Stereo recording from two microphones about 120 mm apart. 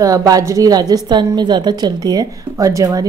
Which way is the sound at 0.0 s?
30° right (ahead or behind).